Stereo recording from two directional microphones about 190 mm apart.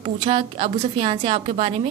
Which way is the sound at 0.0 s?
30° right (ahead or behind).